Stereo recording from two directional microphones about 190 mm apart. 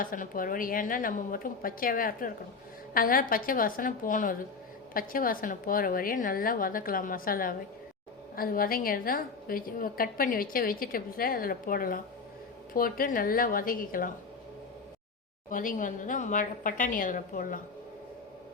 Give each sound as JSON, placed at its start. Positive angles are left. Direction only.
{"t": 0.0, "sound": "a woman's voice", "side_deg": 45}
{"t": 15.4, "sound": "a woman's voice", "side_deg": 45}